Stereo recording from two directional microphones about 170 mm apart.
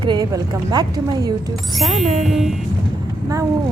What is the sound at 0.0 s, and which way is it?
A woman's voice, 25° right (ahead or behind).